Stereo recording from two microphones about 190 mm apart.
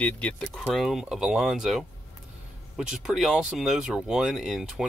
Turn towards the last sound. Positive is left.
turn(degrees=0)  # may be behind; listen again after turning